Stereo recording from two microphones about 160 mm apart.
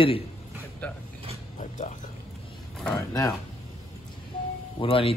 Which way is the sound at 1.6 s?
50° left (ahead or behind).